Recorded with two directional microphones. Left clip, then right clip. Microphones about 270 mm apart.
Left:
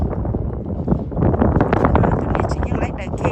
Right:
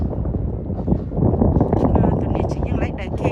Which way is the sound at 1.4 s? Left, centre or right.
Right.